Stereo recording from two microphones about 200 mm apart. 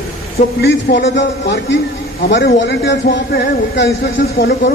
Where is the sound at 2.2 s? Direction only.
55° left (ahead or behind).